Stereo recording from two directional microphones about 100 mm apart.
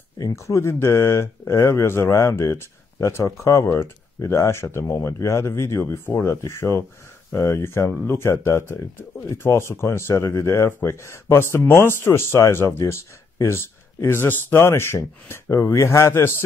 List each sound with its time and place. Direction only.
0.2 s speech: 30° left (ahead or behind)